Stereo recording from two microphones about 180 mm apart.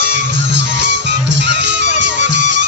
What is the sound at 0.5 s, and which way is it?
Music, 80° right.